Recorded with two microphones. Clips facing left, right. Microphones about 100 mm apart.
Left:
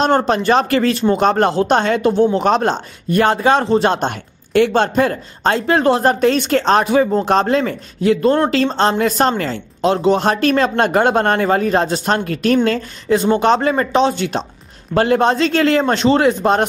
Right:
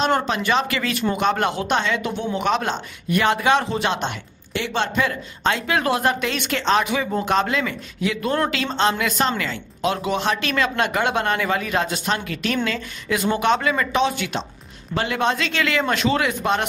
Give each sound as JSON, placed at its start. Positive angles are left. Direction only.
{"t": 0.0, "sound": "speech", "side_deg": 40}
{"t": 13.1, "sound": "speech", "side_deg": 30}